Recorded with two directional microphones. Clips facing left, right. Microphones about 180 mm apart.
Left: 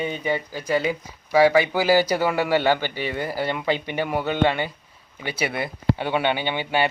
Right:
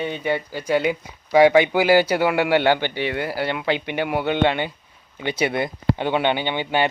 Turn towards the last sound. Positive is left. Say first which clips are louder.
# right 1 dB
turn(degrees=10)  # may be behind; listen again after turning